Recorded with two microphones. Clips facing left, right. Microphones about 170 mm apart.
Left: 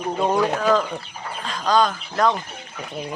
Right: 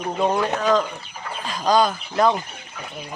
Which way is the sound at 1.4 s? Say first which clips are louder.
Right 1 dB; 10° right (ahead or behind).